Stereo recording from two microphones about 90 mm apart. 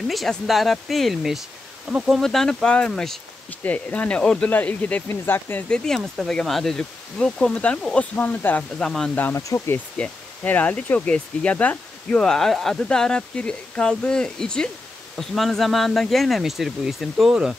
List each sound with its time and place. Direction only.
0.1 s speech: centre (ahead or behind)
3.4 s speech: 15° left (ahead or behind)
5.9 s speech: 5° left (ahead or behind); by 8.6 s 20° left (ahead or behind)
8.7 s speech: 10° left (ahead or behind)
9.1 s speech: 25° left (ahead or behind)
12.2 s speech: 5° left (ahead or behind)